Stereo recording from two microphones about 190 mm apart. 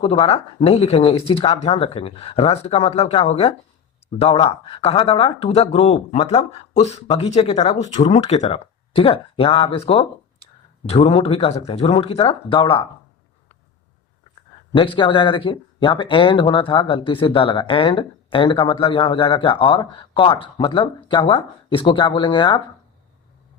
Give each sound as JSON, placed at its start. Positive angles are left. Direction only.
{"t": 0.0, "sound": "speech", "side_deg": 30}
{"t": 14.7, "sound": "speech", "side_deg": 25}